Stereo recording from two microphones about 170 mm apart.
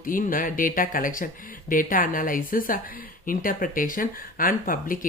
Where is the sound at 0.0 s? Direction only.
55° left (ahead or behind).